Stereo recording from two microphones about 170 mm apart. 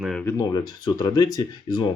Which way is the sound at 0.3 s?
20° left (ahead or behind).